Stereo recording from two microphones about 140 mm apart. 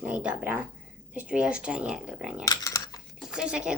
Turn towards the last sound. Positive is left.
turn(degrees=-5)  # may be behind; listen again after turning